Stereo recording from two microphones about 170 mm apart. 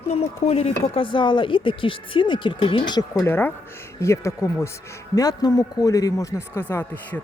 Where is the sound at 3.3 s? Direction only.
10° left (ahead or behind).